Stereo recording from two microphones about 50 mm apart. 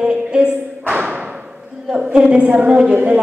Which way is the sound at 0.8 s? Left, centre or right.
Right.